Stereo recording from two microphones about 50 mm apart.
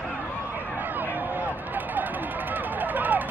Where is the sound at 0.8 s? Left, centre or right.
Right.